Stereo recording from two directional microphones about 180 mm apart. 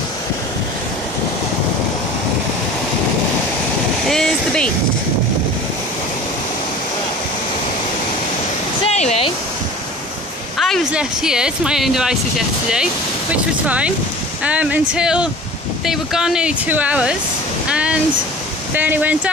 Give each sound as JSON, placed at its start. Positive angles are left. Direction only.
{"t": 4.1, "sound": "vehicle", "side_deg": 5}
{"t": 8.8, "sound": "waterfall", "side_deg": 35}
{"t": 10.6, "sound": "speech", "side_deg": 0}